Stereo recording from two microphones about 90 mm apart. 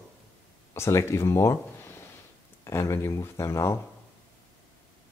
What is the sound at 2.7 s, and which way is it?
Speech, 35° left (ahead or behind).